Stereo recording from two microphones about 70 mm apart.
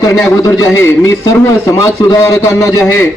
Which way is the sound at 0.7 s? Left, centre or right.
Left.